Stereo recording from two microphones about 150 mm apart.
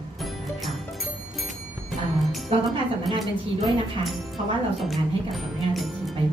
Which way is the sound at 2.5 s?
40° right (ahead or behind).